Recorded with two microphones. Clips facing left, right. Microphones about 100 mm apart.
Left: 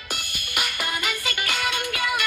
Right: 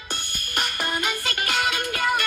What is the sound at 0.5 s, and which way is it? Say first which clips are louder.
Music: right 2 dB; 40° right (ahead or behind).